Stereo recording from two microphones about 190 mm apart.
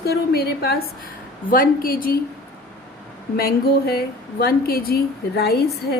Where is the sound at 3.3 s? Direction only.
55° left (ahead or behind).